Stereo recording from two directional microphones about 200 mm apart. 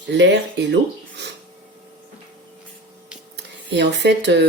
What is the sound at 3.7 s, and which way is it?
Speech, 60° right (ahead or behind).